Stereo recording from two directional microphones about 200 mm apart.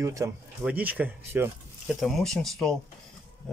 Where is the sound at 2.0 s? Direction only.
Centre (ahead or behind).